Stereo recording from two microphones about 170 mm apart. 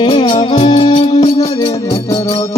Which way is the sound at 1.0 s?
40° left (ahead or behind).